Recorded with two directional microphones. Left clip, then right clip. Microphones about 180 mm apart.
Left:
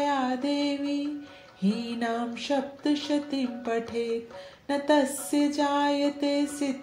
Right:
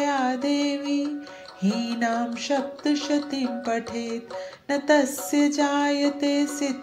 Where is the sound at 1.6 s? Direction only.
40° right (ahead or behind).